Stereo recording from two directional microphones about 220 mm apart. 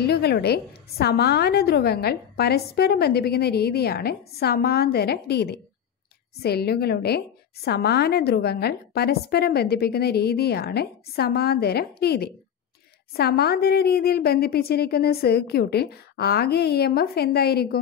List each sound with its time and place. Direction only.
0.0 s a woman's voice: 45° left (ahead or behind)